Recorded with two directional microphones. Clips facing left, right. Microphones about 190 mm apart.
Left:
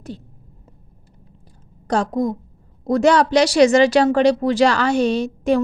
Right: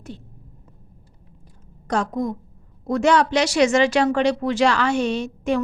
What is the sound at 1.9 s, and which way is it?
A woman's voice, 35° left (ahead or behind).